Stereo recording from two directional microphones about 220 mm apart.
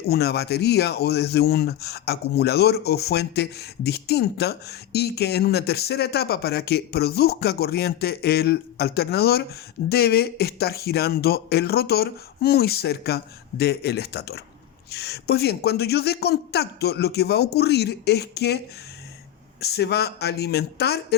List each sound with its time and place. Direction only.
0.1 s speech: 45° left (ahead or behind)
19.6 s speech: 50° left (ahead or behind)